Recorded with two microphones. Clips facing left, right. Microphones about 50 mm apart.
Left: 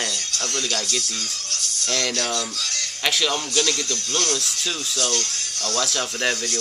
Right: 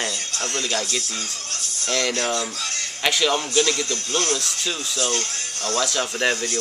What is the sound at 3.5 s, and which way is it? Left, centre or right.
Speech, right.